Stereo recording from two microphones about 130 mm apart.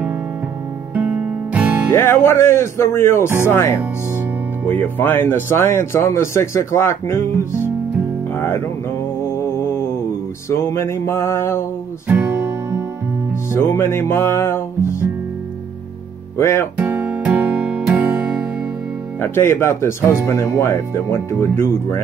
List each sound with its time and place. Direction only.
1.9 s speech: 20° left (ahead or behind)
8.4 s music: 20° left (ahead or behind)
9.2 s a sound: 20° left (ahead or behind)
10.5 s speech: 20° left (ahead or behind)
12.1 s music: 15° right (ahead or behind)
13.5 s speech: 20° left (ahead or behind)
16.3 s speech: 20° left (ahead or behind)
16.7 s music: 10° right (ahead or behind)
19.1 s speech: 15° left (ahead or behind)